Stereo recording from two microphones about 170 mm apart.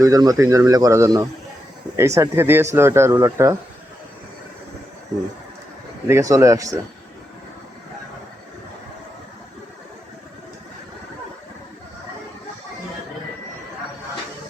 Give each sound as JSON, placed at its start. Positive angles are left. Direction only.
{"t": 0.0, "sound": "speech", "side_deg": -20}
{"t": 6.1, "sound": "speech", "side_deg": -20}